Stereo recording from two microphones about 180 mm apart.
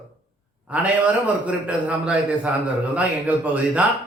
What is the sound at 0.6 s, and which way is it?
A man's voice, 5° right (ahead or behind).